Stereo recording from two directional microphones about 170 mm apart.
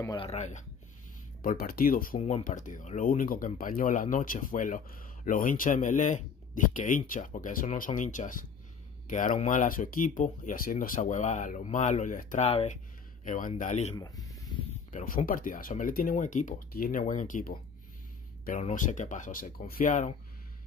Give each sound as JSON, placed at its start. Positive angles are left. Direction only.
{"t": 0.1, "sound": "speech", "side_deg": 35}
{"t": 1.4, "sound": "speech", "side_deg": 55}
{"t": 2.1, "sound": "speech", "side_deg": 40}
{"t": 12.4, "sound": "speech", "side_deg": 35}
{"t": 13.2, "sound": "a man's voice", "side_deg": 50}
{"t": 13.9, "sound": "speech", "side_deg": 20}
{"t": 14.9, "sound": "speech", "side_deg": 40}
{"t": 15.2, "sound": "speech", "side_deg": 55}